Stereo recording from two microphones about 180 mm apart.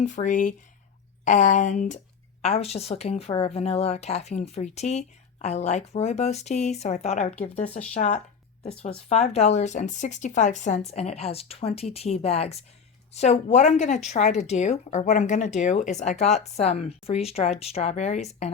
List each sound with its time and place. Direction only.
0.0 s speech: 45° left (ahead or behind)